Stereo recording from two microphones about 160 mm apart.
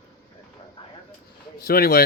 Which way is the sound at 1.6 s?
75° left (ahead or behind).